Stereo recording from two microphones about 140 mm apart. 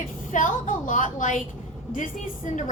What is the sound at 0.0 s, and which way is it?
A woman's voice, 70° left (ahead or behind).